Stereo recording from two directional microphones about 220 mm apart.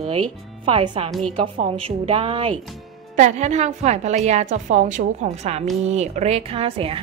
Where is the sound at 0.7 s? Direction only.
25° right (ahead or behind).